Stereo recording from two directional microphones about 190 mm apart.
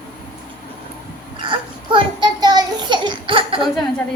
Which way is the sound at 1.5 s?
25° right (ahead or behind).